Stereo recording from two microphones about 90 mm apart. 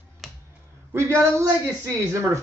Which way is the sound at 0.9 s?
25° right (ahead or behind).